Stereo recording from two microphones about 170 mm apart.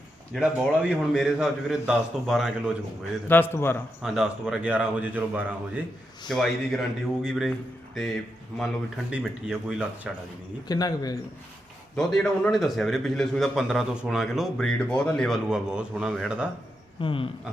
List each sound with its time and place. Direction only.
0.3 s a man's voice: 5° right (ahead or behind)
3.2 s a man's voice: 10° left (ahead or behind)
4.0 s speech: 5° right (ahead or behind)
6.2 s a man's voice: centre (ahead or behind)
8.5 s a man's voice: centre (ahead or behind)
10.7 s a man's voice: 20° left (ahead or behind)
11.9 s a man's voice: 5° left (ahead or behind)
17.0 s a sound: 30° left (ahead or behind)